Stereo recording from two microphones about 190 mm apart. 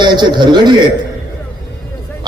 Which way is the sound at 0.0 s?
25° right (ahead or behind).